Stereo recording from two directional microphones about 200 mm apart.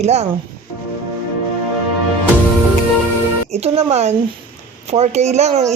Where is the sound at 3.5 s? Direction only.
30° right (ahead or behind).